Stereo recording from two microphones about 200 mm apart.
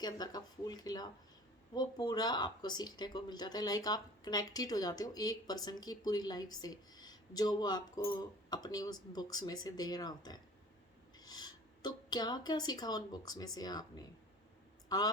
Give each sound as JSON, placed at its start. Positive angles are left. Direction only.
{"t": 0.0, "sound": "speech", "side_deg": 20}